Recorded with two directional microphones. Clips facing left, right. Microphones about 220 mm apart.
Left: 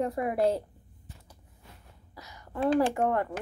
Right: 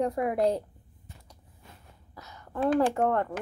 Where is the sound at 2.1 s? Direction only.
10° left (ahead or behind).